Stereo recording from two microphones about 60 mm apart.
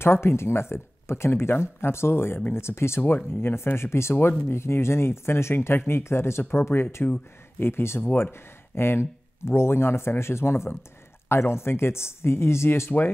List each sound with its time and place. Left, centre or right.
0.0 s speech: left
3.0 s speech: left
3.3 s speech: left
8.0 s speech: left
8.3 s speech: left